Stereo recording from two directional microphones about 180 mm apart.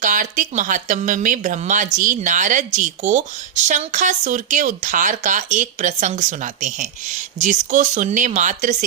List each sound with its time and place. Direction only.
0.0 s a woman's voice: 45° right (ahead or behind)